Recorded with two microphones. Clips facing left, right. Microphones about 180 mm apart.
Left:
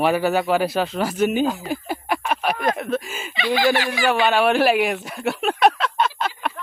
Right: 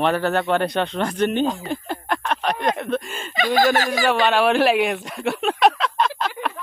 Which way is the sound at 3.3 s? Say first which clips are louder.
Right 1 dB; 45° right (ahead or behind).